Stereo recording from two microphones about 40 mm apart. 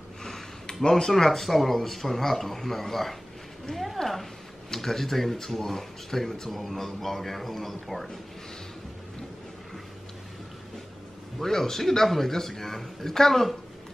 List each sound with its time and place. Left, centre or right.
0.2 s a sound: centre
0.8 s a man's voice: centre
1.1 s a man's voice: centre
11.3 s a man's voice: centre